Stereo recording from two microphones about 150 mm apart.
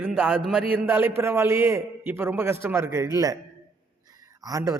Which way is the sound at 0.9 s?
15° right (ahead or behind).